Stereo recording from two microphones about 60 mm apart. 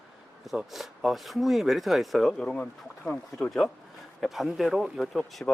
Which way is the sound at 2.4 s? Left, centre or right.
Centre.